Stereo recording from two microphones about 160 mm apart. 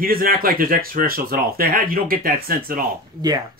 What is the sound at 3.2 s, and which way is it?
Speech, 25° right (ahead or behind).